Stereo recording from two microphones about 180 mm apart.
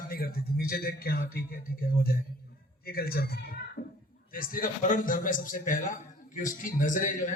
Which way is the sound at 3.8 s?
55° left (ahead or behind).